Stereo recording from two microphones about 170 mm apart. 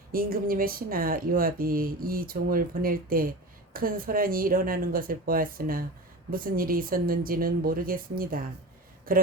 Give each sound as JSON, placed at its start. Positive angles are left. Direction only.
{"t": 0.1, "sound": "speech", "side_deg": -60}